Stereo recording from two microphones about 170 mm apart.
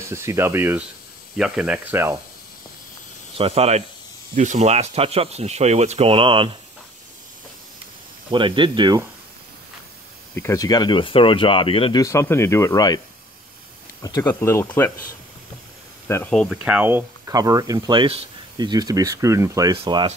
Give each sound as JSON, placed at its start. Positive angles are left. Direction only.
{"t": 0.1, "sound": "speech", "side_deg": -15}
{"t": 3.3, "sound": "speech", "side_deg": -35}
{"t": 8.3, "sound": "speech", "side_deg": -30}
{"t": 10.3, "sound": "speech", "side_deg": 15}
{"t": 12.0, "sound": "speech", "side_deg": 15}
{"t": 14.2, "sound": "speech", "side_deg": 15}
{"t": 16.1, "sound": "speech", "side_deg": 10}
{"t": 16.6, "sound": "speech", "side_deg": -10}
{"t": 19.8, "sound": "speech", "side_deg": -30}